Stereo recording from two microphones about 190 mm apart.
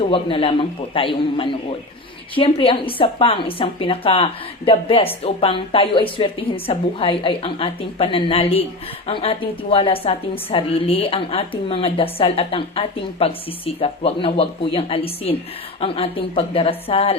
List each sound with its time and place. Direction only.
0.0 s a woman's voice: 30° left (ahead or behind)